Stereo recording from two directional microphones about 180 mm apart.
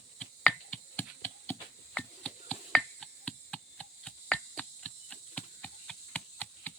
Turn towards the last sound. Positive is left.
turn(degrees=10)  # may be behind; listen again after turning